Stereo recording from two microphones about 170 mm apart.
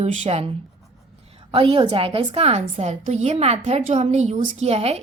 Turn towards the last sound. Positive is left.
turn(degrees=-35)  # may be behind; listen again after turning